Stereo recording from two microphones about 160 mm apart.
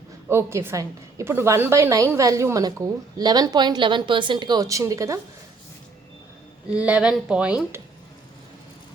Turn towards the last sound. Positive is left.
turn(degrees=-10)  # may be behind; listen again after turning